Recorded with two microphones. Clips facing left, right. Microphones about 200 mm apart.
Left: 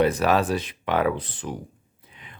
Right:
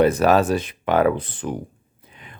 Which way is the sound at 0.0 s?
45° right (ahead or behind).